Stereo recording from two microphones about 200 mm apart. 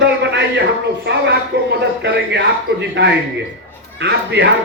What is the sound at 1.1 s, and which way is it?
A man's voice, 60° right (ahead or behind).